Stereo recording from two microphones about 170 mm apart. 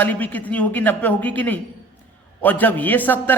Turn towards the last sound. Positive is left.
turn(degrees=10)  # may be behind; listen again after turning